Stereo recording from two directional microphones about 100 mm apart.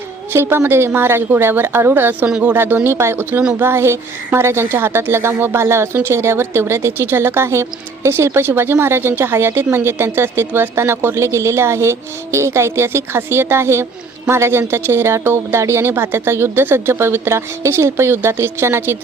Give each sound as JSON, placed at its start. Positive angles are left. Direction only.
{"t": 0.3, "sound": "speech", "side_deg": -25}